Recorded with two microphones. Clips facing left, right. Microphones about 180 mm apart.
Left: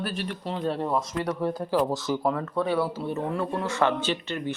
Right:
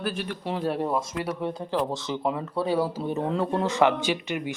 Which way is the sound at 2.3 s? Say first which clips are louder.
Even; 10° right (ahead or behind).